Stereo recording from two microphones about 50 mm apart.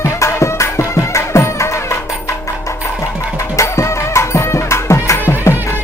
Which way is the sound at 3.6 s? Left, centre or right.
Left.